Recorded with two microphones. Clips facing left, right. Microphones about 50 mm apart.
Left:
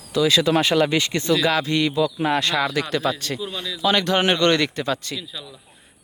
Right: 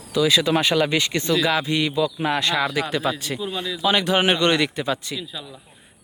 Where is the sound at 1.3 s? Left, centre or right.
Centre.